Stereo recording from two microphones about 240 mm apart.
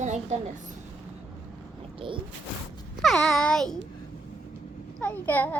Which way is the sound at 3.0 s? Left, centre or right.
Centre.